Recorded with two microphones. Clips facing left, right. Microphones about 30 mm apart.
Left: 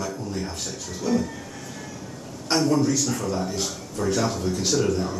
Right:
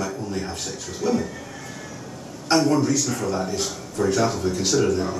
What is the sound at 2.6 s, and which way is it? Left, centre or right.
Speech, centre.